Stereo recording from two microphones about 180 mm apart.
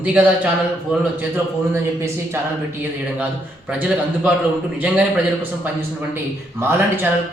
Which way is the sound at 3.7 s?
5° right (ahead or behind).